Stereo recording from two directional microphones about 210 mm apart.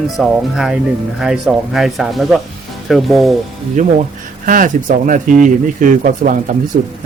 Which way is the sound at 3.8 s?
35° right (ahead or behind).